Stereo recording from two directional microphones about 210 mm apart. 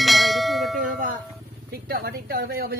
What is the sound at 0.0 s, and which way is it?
Bell, centre (ahead or behind).